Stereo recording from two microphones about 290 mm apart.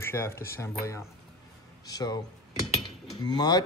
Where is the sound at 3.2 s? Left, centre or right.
Centre.